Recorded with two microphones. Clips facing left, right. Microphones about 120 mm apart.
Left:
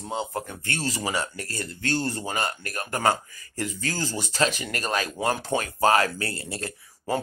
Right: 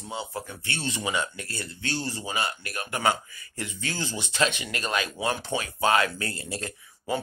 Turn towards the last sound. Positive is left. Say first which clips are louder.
# left 2 dB
turn(degrees=30)  # may be behind; listen again after turning